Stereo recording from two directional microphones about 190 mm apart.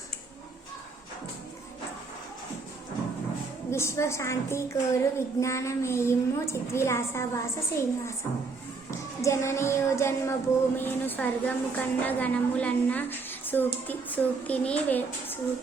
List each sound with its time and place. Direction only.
3.7 s a child's voice: 15° left (ahead or behind)
9.2 s a child's voice: 15° left (ahead or behind)